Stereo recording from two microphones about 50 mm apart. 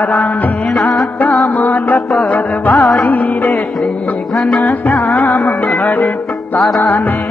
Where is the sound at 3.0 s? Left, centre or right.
Left.